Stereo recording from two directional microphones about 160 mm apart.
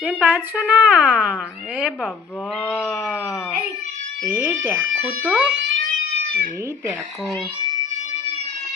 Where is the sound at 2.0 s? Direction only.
5° left (ahead or behind).